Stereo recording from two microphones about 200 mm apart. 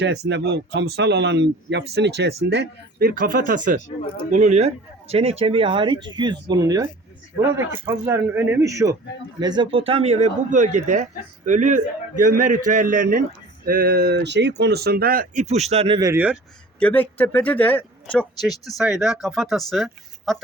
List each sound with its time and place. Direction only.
0.0 s speech: 60° right (ahead or behind); by 6.8 s 15° right (ahead or behind)
7.9 s speech: 10° right (ahead or behind)
16.8 s speech: 10° left (ahead or behind)